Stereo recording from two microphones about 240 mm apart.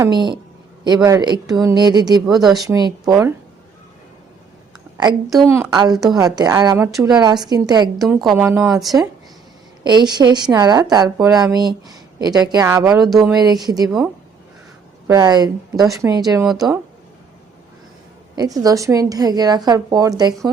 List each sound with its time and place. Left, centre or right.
0.0 s a woman's voice: centre
2.4 s speech: centre
2.6 s a woman's voice: centre
5.5 s a woman's voice: centre
8.3 s speech: centre
9.8 s a woman's voice: centre
12.9 s speech: centre
13.4 s a woman's voice: centre
15.0 s a woman's voice: centre
18.3 s a woman's voice: centre